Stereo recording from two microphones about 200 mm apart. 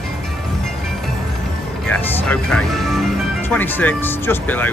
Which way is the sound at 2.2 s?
5° left (ahead or behind).